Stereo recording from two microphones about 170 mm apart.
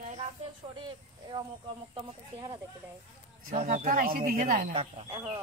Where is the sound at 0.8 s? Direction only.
25° right (ahead or behind).